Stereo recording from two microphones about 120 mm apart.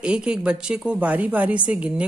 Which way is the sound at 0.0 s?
10° right (ahead or behind).